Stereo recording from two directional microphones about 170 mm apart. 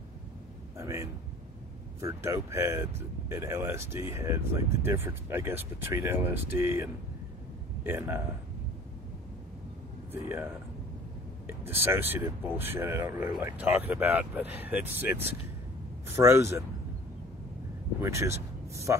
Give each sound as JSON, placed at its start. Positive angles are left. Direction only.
{"t": 0.7, "sound": "a sound", "side_deg": -15}
{"t": 2.0, "sound": "speech", "side_deg": -15}
{"t": 10.1, "sound": "speech", "side_deg": -15}
{"t": 18.0, "sound": "a man's voice", "side_deg": -15}